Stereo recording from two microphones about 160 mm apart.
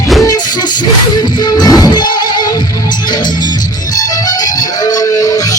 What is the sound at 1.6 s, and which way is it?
Music, 25° left (ahead or behind).